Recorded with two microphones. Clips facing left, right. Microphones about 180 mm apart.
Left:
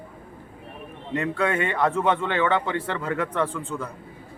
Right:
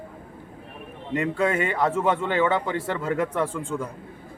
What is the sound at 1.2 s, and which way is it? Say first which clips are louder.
A man's voice: right 1 dB; 10° right (ahead or behind).